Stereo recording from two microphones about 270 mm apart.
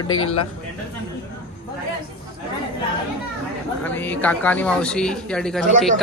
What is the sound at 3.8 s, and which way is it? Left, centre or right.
Speech, centre.